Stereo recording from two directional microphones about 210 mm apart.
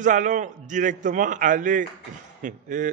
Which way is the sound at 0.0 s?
35° right (ahead or behind).